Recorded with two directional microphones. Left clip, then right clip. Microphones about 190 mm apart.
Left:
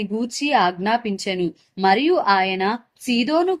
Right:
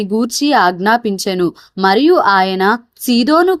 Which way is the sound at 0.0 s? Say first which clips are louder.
Right 8 dB; 30° right (ahead or behind).